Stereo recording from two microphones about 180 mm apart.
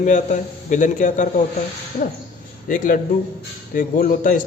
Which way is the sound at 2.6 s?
50° left (ahead or behind).